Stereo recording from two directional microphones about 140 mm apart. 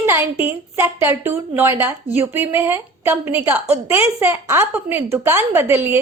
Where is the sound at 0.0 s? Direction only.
15° right (ahead or behind).